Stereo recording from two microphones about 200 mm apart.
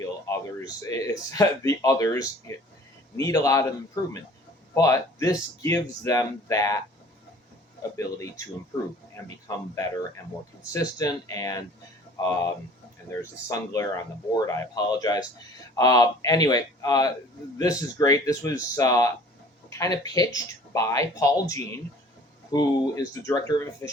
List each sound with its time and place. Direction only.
0.0 s a sound: 15° left (ahead or behind)
0.9 s speech: 15° left (ahead or behind)
4.7 s speech: 15° left (ahead or behind)
9.7 s speech: 15° left (ahead or behind)
13.1 s speech: 15° left (ahead or behind)